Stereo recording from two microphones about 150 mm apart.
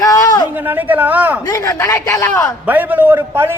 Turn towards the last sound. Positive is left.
turn(degrees=-15)  # may be behind; listen again after turning